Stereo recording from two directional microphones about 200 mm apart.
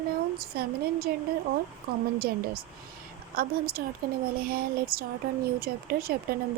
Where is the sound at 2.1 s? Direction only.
50° right (ahead or behind).